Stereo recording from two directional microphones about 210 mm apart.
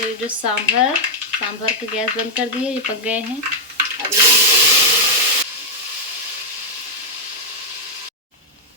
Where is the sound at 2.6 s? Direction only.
5° right (ahead or behind).